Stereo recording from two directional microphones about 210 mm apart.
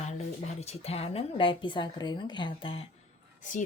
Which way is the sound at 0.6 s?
30° left (ahead or behind).